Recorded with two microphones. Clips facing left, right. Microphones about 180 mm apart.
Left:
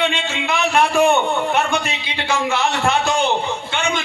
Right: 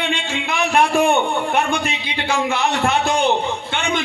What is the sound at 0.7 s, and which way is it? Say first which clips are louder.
Speech: even; 55° right (ahead or behind).